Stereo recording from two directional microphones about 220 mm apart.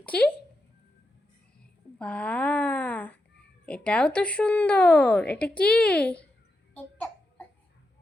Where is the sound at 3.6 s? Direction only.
5° left (ahead or behind).